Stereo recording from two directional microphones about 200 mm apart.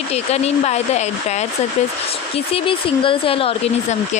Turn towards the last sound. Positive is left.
turn(degrees=30)  # may be behind; listen again after turning